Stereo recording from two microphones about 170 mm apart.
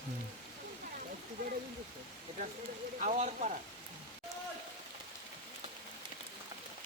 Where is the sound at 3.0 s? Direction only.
45° right (ahead or behind).